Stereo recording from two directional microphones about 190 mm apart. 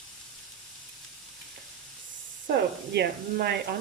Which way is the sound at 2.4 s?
55° right (ahead or behind).